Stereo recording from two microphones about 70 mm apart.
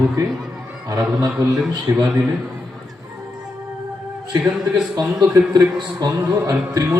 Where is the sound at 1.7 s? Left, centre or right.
Right.